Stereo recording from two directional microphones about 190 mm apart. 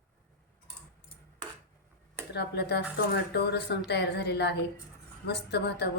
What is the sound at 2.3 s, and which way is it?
Speech, 60° left (ahead or behind).